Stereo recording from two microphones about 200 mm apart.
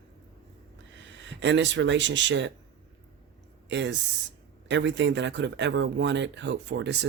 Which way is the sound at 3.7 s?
65° right (ahead or behind).